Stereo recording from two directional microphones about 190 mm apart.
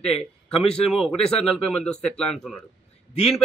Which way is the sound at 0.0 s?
5° left (ahead or behind).